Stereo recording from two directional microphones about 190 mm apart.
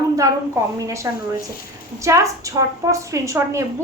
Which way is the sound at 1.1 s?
15° right (ahead or behind).